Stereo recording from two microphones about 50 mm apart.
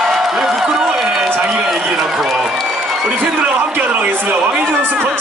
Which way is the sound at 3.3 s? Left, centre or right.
Right.